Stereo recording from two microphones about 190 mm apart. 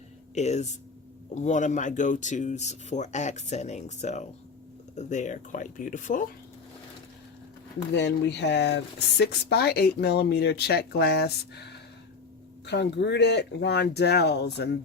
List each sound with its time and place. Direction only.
0.3 s speech: 35° left (ahead or behind)
7.9 s speech: 65° left (ahead or behind)